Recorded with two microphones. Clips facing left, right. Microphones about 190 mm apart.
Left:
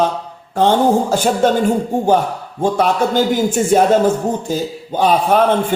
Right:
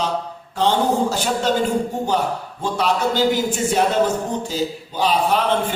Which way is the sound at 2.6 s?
50° left (ahead or behind).